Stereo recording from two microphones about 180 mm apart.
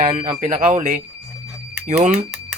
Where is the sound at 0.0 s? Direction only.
40° right (ahead or behind).